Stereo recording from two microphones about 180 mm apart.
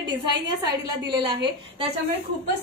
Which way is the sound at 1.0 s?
25° right (ahead or behind).